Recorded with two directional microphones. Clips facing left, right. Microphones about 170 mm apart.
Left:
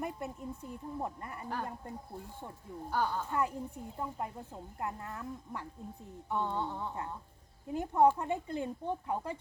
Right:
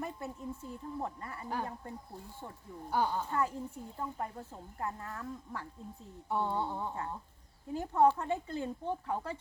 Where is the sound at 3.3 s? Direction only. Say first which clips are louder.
Even; 15° left (ahead or behind).